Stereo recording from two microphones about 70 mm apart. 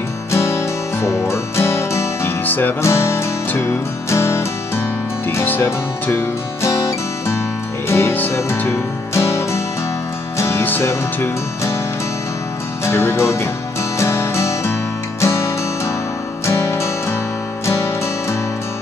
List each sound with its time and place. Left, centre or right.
0.3 s music: left
2.4 s music: left
2.8 s music: left
6.6 s music: left
7.9 s music: left
12.8 s music: left